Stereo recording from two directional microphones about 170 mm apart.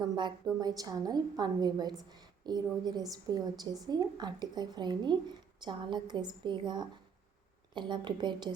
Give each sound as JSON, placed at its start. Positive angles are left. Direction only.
{"t": 0.0, "sound": "a woman's voice", "side_deg": -25}